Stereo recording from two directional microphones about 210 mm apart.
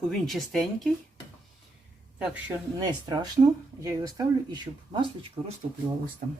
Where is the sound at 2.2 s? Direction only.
5° right (ahead or behind).